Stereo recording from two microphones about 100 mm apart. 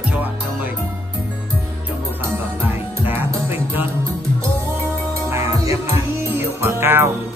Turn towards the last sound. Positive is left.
turn(degrees=-25)  # may be behind; listen again after turning